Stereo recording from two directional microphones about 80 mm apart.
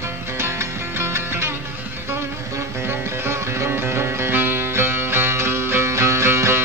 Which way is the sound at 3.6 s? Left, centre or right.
Right.